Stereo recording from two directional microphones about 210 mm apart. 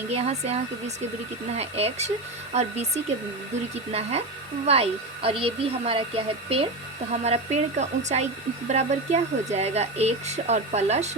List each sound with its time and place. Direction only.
0.1 s speech: 30° right (ahead or behind)
4.6 s speech: 30° right (ahead or behind)